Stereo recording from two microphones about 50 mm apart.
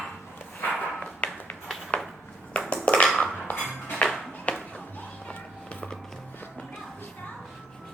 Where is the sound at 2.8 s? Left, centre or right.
Left.